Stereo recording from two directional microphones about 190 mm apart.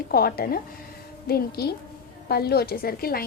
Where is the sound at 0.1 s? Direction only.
55° left (ahead or behind).